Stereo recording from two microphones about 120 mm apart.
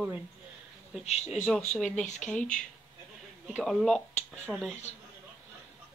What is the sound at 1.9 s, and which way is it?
Speech, 90° left.